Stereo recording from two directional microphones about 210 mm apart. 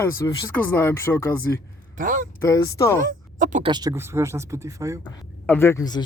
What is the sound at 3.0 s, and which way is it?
Speech, 40° right (ahead or behind).